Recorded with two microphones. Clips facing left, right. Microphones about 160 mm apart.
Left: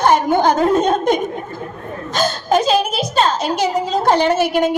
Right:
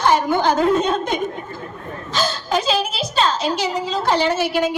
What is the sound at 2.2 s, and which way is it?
A woman's voice, 45° left (ahead or behind).